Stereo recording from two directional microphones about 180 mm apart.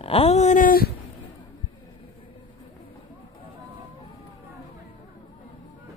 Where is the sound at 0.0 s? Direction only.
30° left (ahead or behind); by 0.9 s 55° left (ahead or behind).